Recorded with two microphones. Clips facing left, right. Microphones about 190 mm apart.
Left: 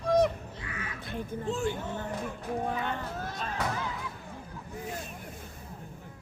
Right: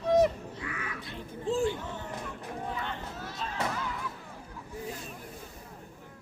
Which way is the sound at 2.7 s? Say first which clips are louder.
Left 4 dB; 50° left (ahead or behind).